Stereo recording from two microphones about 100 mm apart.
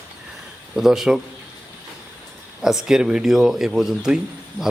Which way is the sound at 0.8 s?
5° right (ahead or behind).